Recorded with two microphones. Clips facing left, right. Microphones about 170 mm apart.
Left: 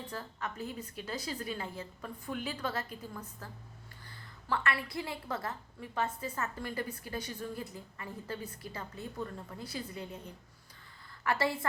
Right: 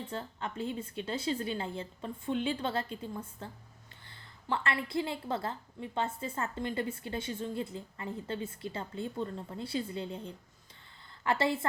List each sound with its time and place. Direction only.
0.0 s a woman's voice: 25° right (ahead or behind)